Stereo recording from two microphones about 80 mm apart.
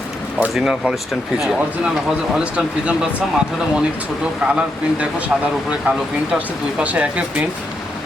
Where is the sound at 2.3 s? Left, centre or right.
Centre.